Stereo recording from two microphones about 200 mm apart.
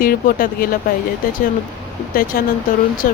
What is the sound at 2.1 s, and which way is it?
Speech, 45° left (ahead or behind).